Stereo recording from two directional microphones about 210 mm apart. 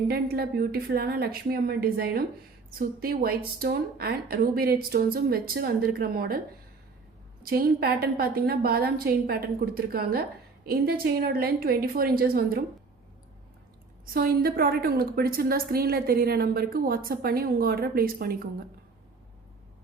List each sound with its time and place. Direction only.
0.1 s a woman's voice: 50° right (ahead or behind)
7.5 s a woman's voice: 45° right (ahead or behind)
14.0 s a woman's voice: 45° right (ahead or behind)